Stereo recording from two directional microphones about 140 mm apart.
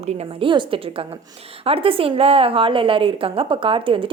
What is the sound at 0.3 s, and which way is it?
A woman's voice, 40° right (ahead or behind).